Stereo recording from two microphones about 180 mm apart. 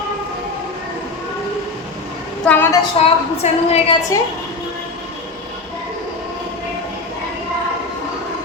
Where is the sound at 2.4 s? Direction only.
10° left (ahead or behind).